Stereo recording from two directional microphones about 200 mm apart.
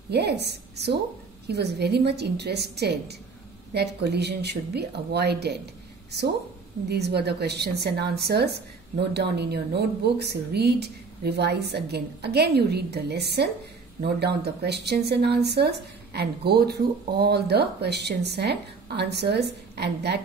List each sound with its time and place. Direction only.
0.1 s speech: 55° right (ahead or behind)
6.9 s speech: 55° right (ahead or behind)